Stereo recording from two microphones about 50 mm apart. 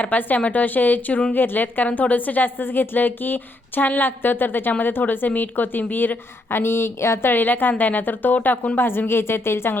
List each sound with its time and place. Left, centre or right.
0.0 s a woman's voice: left
7.3 s a woman's voice: left